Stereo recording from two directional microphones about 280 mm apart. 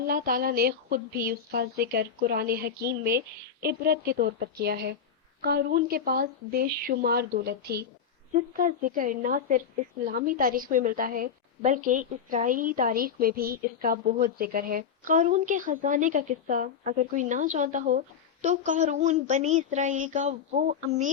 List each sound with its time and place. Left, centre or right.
0.1 s a woman's voice: right